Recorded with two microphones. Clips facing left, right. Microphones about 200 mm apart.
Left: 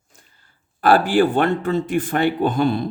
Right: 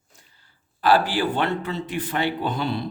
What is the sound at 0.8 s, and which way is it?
Speech, 50° left (ahead or behind).